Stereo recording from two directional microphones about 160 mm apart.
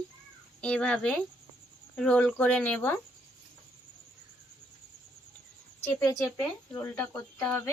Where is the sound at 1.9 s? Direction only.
5° left (ahead or behind).